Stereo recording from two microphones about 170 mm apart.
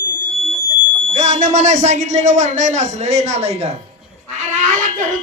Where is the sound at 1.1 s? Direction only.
40° right (ahead or behind).